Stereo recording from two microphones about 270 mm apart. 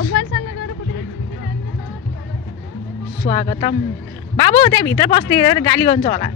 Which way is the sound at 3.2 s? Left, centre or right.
Left.